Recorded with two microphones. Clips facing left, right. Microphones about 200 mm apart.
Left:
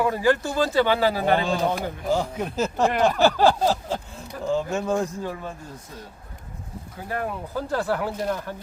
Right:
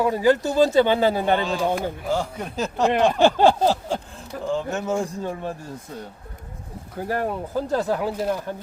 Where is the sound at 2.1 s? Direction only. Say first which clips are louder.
Left 4 dB; 10° left (ahead or behind).